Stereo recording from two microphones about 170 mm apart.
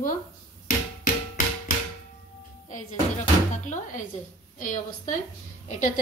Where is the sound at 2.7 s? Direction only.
45° left (ahead or behind).